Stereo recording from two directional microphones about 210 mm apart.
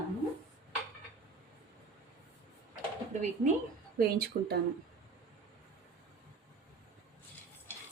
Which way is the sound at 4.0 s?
50° right (ahead or behind).